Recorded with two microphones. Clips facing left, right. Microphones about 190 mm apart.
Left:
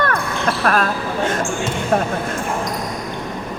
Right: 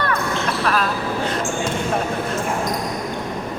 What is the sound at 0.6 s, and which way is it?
Speech, 50° left (ahead or behind).